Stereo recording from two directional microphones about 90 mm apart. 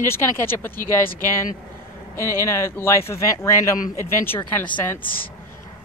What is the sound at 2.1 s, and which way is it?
Speech, 30° left (ahead or behind).